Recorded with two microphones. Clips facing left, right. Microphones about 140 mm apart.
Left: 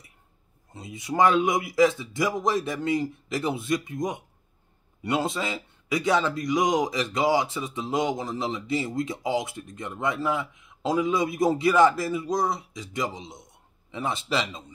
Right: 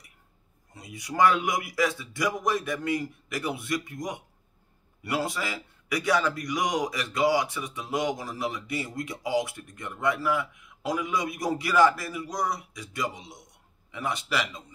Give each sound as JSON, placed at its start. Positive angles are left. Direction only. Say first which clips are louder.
{"t": 0.7, "sound": "speech", "louder": "left 2 dB", "side_deg": 25}